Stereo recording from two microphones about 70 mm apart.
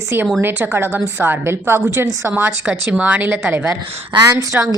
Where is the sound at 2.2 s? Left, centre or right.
Right.